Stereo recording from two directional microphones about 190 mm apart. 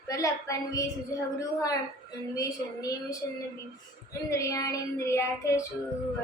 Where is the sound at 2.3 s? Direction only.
20° left (ahead or behind).